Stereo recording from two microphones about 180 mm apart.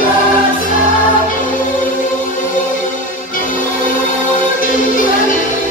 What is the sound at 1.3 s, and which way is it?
Music, 50° left (ahead or behind).